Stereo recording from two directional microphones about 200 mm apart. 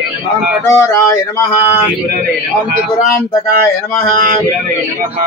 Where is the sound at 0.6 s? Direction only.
15° left (ahead or behind).